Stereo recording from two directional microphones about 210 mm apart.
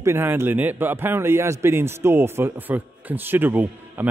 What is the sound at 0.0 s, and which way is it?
Speech, 10° right (ahead or behind).